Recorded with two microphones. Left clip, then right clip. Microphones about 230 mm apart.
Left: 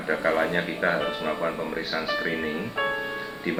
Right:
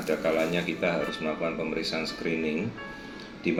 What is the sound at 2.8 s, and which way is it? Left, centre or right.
Speech, left.